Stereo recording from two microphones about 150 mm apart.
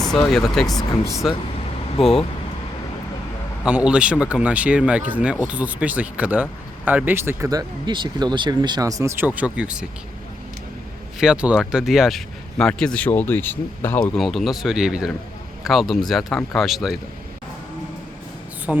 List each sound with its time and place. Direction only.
0.1 s speech: 5° left (ahead or behind)
3.7 s speech: 5° right (ahead or behind)
7.9 s speech: 30° right (ahead or behind); by 9.9 s 5° right (ahead or behind)
11.2 s speech: 5° right (ahead or behind); by 14.0 s 15° left (ahead or behind)
14.2 s speech: centre (ahead or behind)
18.7 s speech: centre (ahead or behind)